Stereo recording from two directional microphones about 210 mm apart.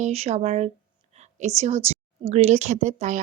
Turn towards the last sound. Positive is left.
turn(degrees=-35)  # may be behind; listen again after turning